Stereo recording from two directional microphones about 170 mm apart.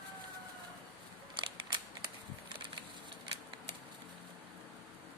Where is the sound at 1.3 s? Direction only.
30° right (ahead or behind).